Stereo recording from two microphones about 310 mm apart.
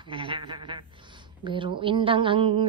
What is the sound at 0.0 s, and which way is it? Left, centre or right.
A woman's voice, centre.